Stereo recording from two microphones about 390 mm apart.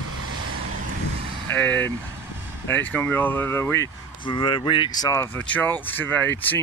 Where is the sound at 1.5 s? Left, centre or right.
Centre.